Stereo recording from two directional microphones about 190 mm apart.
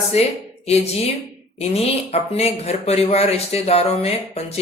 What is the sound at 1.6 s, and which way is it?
Speech, 35° left (ahead or behind).